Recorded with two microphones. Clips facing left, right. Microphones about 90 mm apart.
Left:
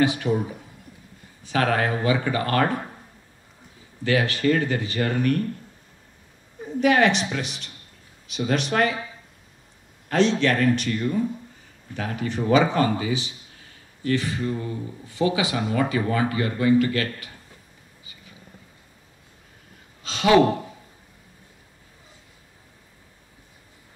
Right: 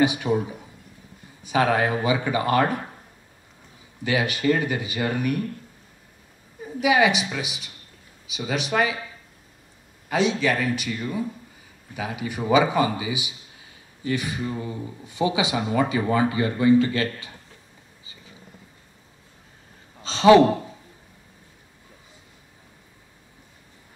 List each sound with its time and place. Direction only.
0.0 s speech: 15° right (ahead or behind)
1.4 s speech: 15° right (ahead or behind)
4.0 s speech: 15° right (ahead or behind)
6.8 s speech: 5° right (ahead or behind)
10.0 s speech: 5° right (ahead or behind); by 17.3 s 25° right (ahead or behind)
20.0 s a sound: 30° right (ahead or behind)